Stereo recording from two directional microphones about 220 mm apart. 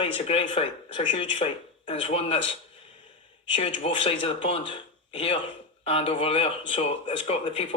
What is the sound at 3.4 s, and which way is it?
Speech, 25° left (ahead or behind).